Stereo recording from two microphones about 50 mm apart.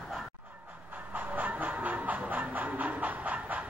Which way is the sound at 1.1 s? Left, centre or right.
Right.